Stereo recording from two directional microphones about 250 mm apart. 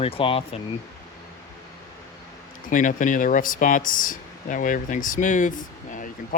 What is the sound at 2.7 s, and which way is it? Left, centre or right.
Speech, left.